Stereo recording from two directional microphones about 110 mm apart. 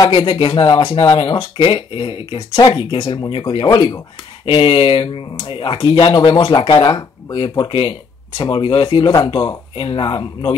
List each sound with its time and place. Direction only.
0.1 s speech: 55° left (ahead or behind)
4.5 s speech: 55° left (ahead or behind)
9.1 s speech: 40° left (ahead or behind)
9.8 s speech: 50° left (ahead or behind)